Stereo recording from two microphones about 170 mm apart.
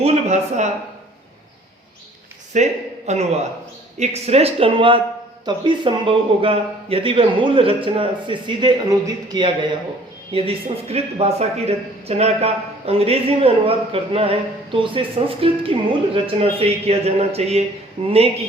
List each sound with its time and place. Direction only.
0.0 s speech: 40° right (ahead or behind)
2.5 s a man's voice: 45° right (ahead or behind); by 9.5 s 25° right (ahead or behind)
10.3 s speech: 35° right (ahead or behind)